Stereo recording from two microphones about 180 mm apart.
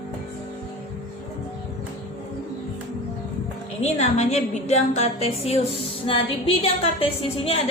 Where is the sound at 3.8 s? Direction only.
40° left (ahead or behind).